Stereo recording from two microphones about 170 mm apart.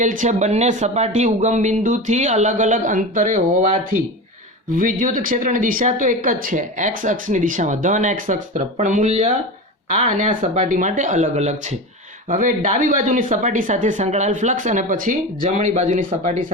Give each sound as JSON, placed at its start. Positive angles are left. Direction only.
{"t": 0.0, "sound": "speech", "side_deg": -50}
{"t": 4.8, "sound": "speech", "side_deg": -50}